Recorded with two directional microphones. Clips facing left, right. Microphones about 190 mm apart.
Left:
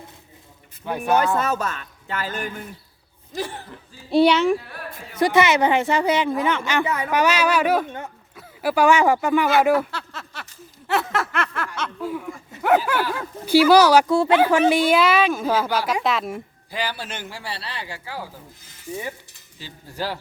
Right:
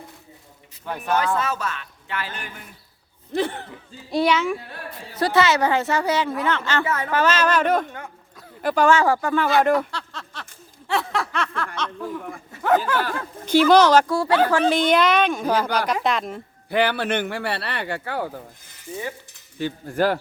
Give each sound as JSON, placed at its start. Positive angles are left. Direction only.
{"t": 0.9, "sound": "a woman's voice", "side_deg": 10}
{"t": 1.4, "sound": "speech", "side_deg": 45}
{"t": 3.3, "sound": "speech", "side_deg": -60}
{"t": 4.1, "sound": "speech", "side_deg": 30}
{"t": 5.2, "sound": "a woman's voice", "side_deg": 20}
{"t": 14.1, "sound": "speech", "side_deg": 20}
{"t": 14.3, "sound": "a woman's voice", "side_deg": 10}
{"t": 16.6, "sound": "speech", "side_deg": -60}
{"t": 19.5, "sound": "speech", "side_deg": -55}